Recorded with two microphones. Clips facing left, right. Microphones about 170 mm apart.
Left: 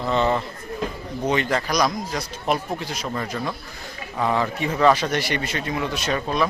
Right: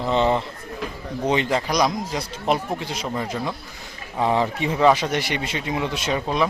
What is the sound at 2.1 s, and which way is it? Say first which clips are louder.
Speech: right 1 dB; 25° right (ahead or behind).